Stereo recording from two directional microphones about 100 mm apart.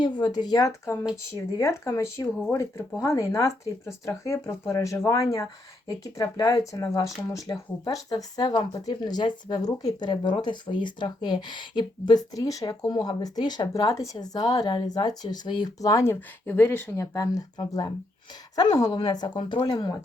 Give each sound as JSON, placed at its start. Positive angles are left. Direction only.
{"t": 0.0, "sound": "speech", "side_deg": 45}
{"t": 0.7, "sound": "speech", "side_deg": 25}
{"t": 16.5, "sound": "speech", "side_deg": 20}
{"t": 17.7, "sound": "speech", "side_deg": 40}
{"t": 19.4, "sound": "speech", "side_deg": 55}